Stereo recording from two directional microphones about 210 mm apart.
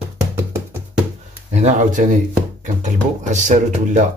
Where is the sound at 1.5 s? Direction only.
35° right (ahead or behind).